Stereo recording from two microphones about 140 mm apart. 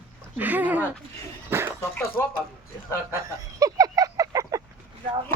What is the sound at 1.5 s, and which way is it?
Dog, 15° right (ahead or behind).